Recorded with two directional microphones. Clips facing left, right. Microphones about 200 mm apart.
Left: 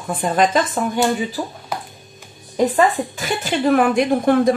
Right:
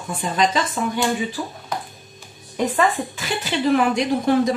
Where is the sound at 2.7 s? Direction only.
45° left (ahead or behind).